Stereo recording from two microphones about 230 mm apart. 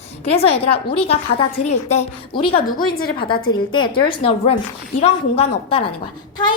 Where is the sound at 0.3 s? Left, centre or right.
Left.